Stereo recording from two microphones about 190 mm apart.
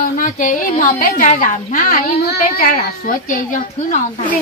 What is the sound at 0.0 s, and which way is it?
A woman's voice, 45° left (ahead or behind).